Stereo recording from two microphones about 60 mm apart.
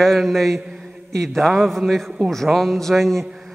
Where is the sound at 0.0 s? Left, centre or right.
Centre.